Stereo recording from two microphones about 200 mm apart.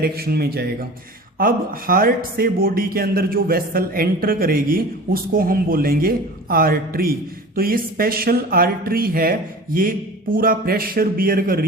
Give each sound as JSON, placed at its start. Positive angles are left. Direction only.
{"t": 0.0, "sound": "speech", "side_deg": -50}